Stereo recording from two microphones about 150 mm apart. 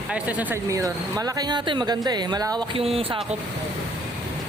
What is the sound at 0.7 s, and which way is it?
Speech, 25° right (ahead or behind).